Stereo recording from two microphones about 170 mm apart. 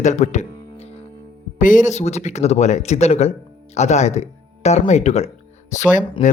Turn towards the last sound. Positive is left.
turn(degrees=45)  # may be behind; listen again after turning